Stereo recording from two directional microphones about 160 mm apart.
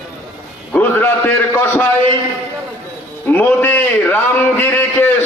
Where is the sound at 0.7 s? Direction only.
10° left (ahead or behind).